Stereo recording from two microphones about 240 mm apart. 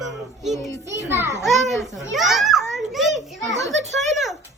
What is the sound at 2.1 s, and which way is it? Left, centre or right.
Speech, centre.